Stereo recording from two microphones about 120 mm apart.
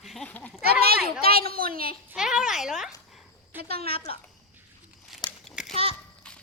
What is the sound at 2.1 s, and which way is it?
Speech, 5° right (ahead or behind).